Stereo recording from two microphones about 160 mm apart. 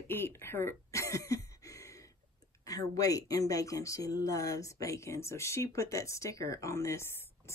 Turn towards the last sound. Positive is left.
turn(degrees=15)  # may be behind; listen again after turning